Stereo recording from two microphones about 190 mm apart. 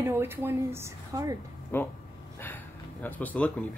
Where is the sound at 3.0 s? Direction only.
10° left (ahead or behind).